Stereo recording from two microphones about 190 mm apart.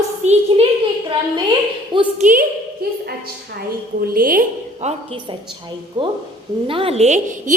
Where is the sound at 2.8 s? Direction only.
55° right (ahead or behind).